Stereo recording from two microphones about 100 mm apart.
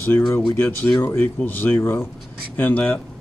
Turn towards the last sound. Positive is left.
turn(degrees=10)  # may be behind; listen again after turning